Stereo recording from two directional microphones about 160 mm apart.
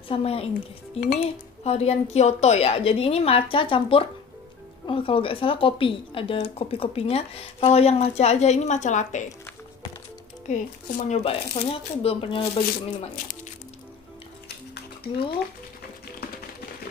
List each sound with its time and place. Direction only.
0.1 s speech: 40° left (ahead or behind)
10.5 s speech: 45° left (ahead or behind)